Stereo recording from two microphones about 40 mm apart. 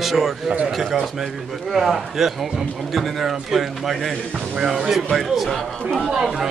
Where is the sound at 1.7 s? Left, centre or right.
Centre.